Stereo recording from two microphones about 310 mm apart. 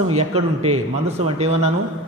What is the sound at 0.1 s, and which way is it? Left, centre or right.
A man's voice, centre.